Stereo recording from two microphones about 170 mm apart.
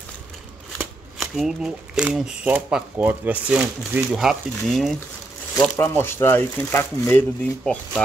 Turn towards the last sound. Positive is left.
turn(degrees=10)  # may be behind; listen again after turning